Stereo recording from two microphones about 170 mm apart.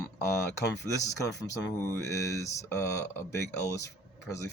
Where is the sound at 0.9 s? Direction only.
20° left (ahead or behind).